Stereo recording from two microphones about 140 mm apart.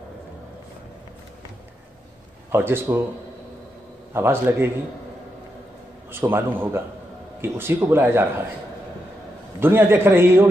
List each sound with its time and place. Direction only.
2.5 s a man's voice: 15° right (ahead or behind)
4.1 s a man's voice: 15° right (ahead or behind)
6.2 s a man's voice: 15° right (ahead or behind)
9.6 s a man's voice: 15° right (ahead or behind)